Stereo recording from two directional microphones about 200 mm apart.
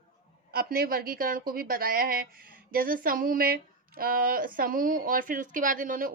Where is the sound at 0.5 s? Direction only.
50° right (ahead or behind).